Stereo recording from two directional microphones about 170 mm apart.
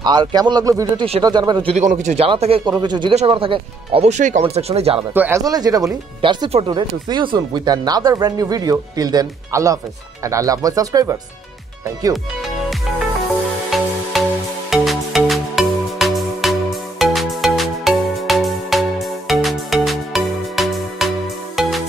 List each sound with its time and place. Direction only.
0.0 s speech: 25° right (ahead or behind)
5.1 s speech: 10° right (ahead or behind)
5.4 s speech: 20° right (ahead or behind)
13.2 s music: centre (ahead or behind)